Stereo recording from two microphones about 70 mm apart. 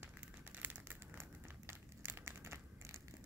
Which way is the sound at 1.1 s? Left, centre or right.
Right.